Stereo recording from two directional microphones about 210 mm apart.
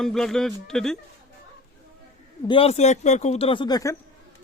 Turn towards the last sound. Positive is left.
turn(degrees=20)  # may be behind; listen again after turning